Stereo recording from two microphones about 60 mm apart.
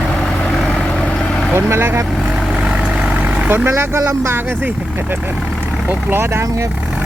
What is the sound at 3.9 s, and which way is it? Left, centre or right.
Speech, right.